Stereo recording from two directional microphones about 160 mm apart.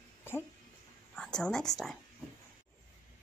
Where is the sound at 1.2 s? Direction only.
5° left (ahead or behind).